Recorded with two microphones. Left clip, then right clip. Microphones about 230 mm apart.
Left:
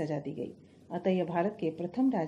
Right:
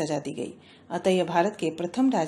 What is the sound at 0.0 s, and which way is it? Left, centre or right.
A woman's voice, centre.